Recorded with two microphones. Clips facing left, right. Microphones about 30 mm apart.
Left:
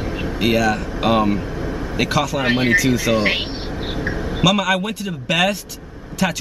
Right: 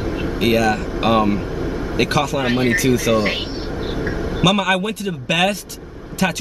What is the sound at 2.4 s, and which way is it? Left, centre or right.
Speech, centre.